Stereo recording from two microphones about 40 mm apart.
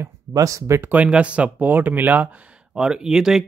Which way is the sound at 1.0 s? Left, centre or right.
Right.